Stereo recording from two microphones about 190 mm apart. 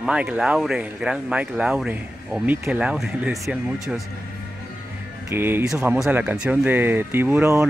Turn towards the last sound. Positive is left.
turn(degrees=-10)  # may be behind; listen again after turning